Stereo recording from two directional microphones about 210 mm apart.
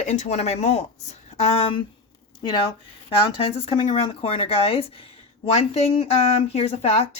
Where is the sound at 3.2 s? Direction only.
25° left (ahead or behind).